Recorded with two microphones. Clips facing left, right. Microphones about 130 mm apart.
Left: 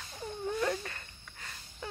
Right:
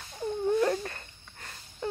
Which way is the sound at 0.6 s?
35° right (ahead or behind).